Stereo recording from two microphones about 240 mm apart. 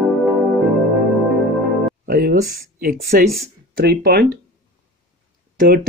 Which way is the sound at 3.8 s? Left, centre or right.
Right.